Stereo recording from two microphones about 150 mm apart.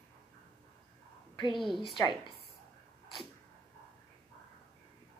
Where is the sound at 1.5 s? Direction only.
Centre (ahead or behind).